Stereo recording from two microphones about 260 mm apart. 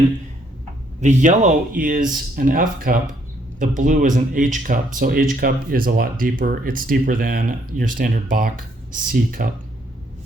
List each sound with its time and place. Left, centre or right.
1.0 s speech: right